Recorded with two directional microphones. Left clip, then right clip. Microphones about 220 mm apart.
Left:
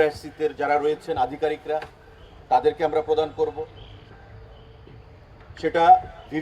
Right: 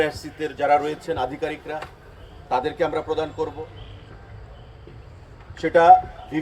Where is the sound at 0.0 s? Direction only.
45° left (ahead or behind).